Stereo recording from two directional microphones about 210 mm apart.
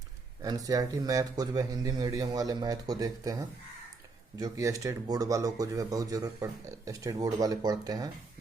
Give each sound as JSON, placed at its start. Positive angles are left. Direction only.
{"t": 0.4, "sound": "speech", "side_deg": -15}